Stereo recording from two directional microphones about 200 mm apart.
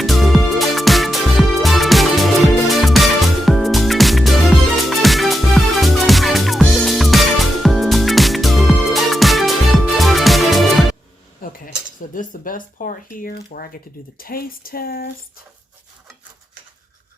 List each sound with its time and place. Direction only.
0.0 s music: centre (ahead or behind)
11.3 s cutlery: 45° left (ahead or behind)
12.1 s speech: 40° left (ahead or behind)